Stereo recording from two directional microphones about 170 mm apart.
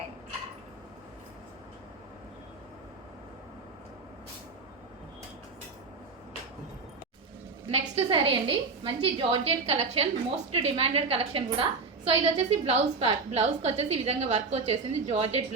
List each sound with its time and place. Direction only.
7.7 s a woman's voice: 35° right (ahead or behind)